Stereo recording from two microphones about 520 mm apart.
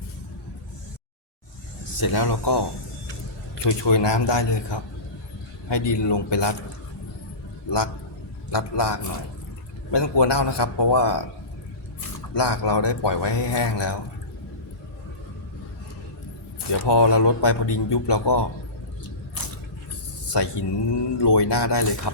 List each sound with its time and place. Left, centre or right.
2.0 s speech: left
8.4 s speech: left
12.3 s speech: left
16.8 s speech: left
20.3 s speech: left